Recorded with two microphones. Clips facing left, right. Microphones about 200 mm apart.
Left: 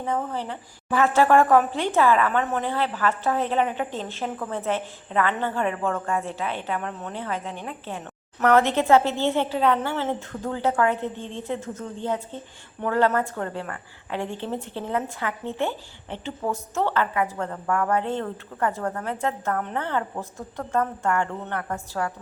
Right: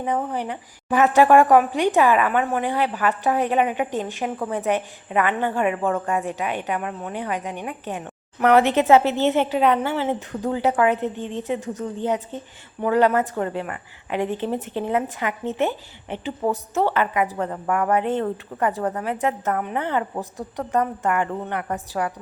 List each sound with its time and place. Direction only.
0.0 s a woman's voice: 15° right (ahead or behind)